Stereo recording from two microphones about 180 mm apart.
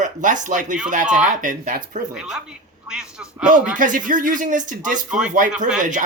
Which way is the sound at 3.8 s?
45° right (ahead or behind).